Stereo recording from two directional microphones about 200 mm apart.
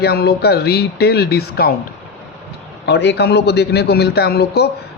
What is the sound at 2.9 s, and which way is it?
A man's voice, 60° left (ahead or behind).